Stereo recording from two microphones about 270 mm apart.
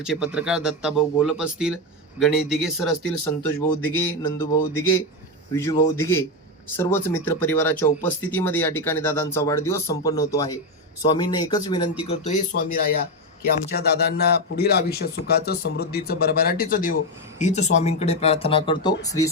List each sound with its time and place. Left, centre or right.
0.0 s a man's voice: centre